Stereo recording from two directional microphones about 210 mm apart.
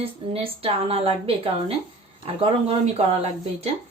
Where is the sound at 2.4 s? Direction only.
25° right (ahead or behind).